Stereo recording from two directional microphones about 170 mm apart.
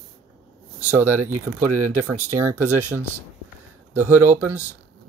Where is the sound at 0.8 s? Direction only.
10° right (ahead or behind).